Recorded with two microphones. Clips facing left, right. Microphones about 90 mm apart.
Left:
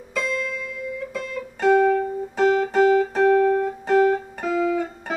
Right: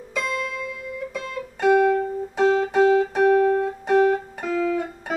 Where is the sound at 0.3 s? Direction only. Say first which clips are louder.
Even; 65° right (ahead or behind).